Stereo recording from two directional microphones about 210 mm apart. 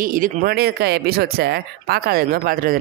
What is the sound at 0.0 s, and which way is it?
Speech, 40° right (ahead or behind).